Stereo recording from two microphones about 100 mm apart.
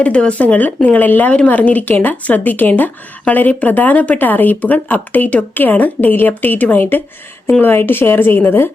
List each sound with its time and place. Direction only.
0.0 s a woman's voice: 10° left (ahead or behind)